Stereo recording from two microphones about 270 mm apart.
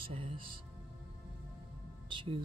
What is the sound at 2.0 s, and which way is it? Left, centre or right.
Music, centre.